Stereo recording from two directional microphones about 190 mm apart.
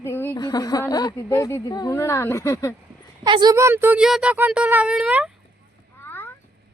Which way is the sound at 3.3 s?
25° right (ahead or behind).